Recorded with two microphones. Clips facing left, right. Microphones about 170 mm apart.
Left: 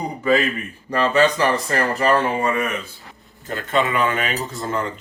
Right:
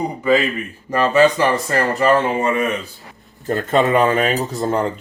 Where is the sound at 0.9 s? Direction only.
15° right (ahead or behind).